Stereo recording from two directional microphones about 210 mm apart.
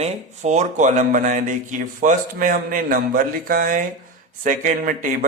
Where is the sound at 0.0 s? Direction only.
35° right (ahead or behind).